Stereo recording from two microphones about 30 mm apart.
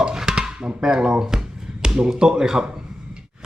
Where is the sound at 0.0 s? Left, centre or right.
Right.